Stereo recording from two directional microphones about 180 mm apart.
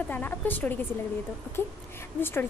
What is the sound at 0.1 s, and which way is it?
Speech, 10° left (ahead or behind).